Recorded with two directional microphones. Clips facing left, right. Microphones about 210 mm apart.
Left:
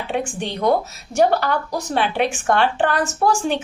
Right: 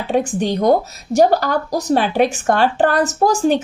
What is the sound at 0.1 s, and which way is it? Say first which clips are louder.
Speech: right 8 dB; 40° right (ahead or behind).